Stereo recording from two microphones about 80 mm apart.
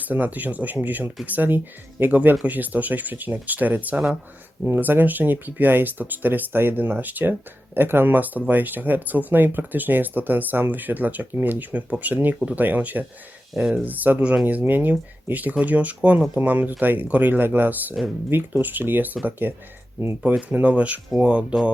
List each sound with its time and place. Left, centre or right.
0.0 s speech: right
13.5 s speech: centre
13.8 s speech: right